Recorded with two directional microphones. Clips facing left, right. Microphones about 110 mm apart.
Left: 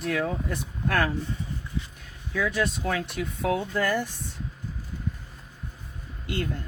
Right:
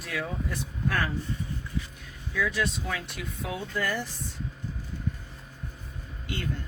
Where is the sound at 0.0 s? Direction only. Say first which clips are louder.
Left 6 dB; 55° left (ahead or behind).